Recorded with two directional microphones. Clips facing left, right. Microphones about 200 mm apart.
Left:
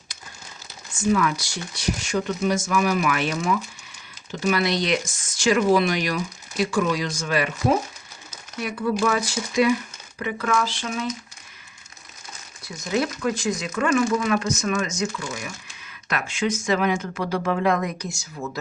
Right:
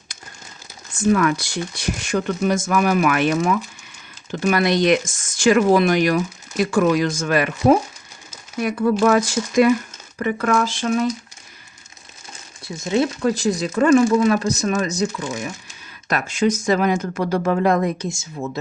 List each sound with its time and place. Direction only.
0.9 s speech: 55° right (ahead or behind)
12.6 s speech: 25° right (ahead or behind)
16.0 s speech: 40° right (ahead or behind)
18.0 s speech: 25° right (ahead or behind)